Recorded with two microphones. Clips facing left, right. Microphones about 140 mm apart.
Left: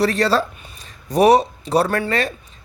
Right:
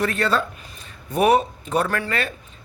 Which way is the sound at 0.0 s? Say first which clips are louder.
Left 4 dB; 35° left (ahead or behind).